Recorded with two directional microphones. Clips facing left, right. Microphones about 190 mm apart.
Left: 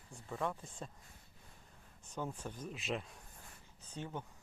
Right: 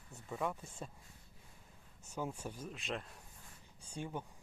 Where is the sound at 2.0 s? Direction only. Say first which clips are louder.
Right 1 dB; 10° right (ahead or behind).